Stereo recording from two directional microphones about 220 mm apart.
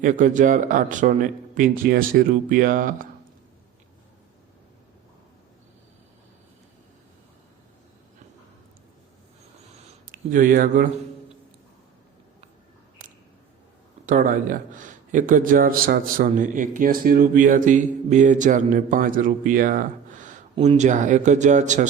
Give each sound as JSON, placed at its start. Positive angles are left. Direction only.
{"t": 0.0, "sound": "speech", "side_deg": -35}
{"t": 10.1, "sound": "speech", "side_deg": -40}
{"t": 14.1, "sound": "speech", "side_deg": -40}